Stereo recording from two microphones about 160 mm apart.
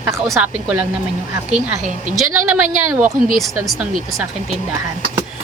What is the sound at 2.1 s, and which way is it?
Speech, 50° right (ahead or behind).